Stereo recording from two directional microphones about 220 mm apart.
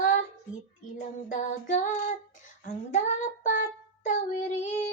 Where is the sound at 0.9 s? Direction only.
35° left (ahead or behind).